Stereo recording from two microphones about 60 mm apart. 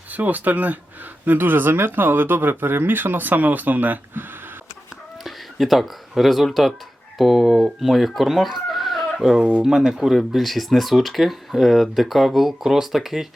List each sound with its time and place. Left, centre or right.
0.1 s speech: right
5.2 s speech: centre
9.4 s speech: right
9.6 s speech: centre